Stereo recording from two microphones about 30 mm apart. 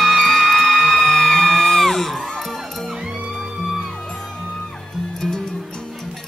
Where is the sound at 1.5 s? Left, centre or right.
Centre.